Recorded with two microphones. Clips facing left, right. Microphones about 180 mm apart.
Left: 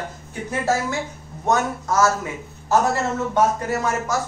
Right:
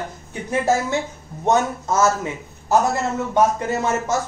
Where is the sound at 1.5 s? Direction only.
20° right (ahead or behind).